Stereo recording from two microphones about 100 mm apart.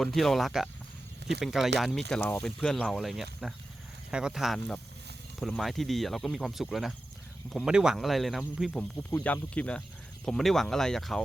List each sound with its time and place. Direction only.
0.0 s speech: centre (ahead or behind)
9.0 s speech: 15° left (ahead or behind)